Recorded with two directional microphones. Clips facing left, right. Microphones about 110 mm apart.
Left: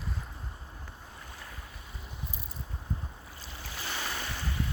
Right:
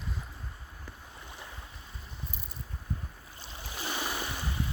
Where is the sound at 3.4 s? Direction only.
20° right (ahead or behind).